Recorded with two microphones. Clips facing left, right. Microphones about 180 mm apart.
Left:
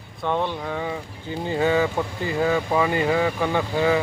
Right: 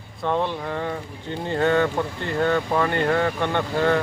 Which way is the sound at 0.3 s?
Centre (ahead or behind).